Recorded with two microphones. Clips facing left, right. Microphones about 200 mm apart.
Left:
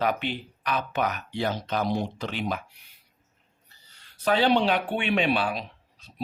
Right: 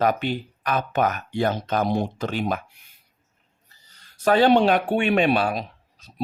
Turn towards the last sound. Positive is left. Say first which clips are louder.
# right 2 dB
turn(degrees=-45)  # may be behind; listen again after turning